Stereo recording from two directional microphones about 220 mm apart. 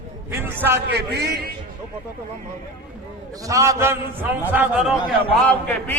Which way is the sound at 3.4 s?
15° right (ahead or behind).